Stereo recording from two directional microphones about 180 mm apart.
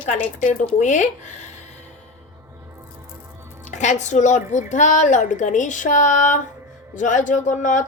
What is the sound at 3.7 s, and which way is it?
A woman's voice, 40° left (ahead or behind).